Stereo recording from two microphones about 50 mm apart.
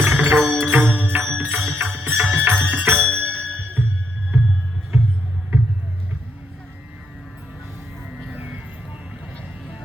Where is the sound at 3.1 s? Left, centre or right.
Right.